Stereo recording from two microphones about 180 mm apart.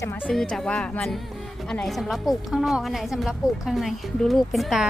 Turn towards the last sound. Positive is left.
turn(degrees=0)  # may be behind; listen again after turning